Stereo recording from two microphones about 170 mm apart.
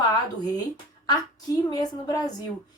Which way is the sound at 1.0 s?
25° left (ahead or behind).